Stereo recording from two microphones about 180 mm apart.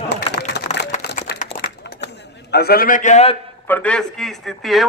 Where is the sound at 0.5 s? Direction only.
70° left (ahead or behind).